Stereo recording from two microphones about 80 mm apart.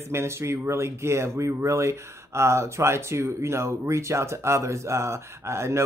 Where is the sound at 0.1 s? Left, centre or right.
Right.